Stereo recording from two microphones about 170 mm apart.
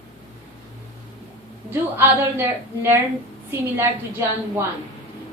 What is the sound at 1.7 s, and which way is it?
A woman's voice, 15° right (ahead or behind).